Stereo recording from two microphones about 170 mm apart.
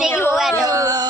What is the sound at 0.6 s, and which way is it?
Speech, 20° right (ahead or behind).